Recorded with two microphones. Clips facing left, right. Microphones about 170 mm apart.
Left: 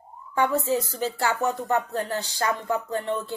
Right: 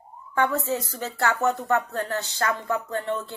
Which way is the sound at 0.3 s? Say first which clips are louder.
Left 1 dB; 15° left (ahead or behind).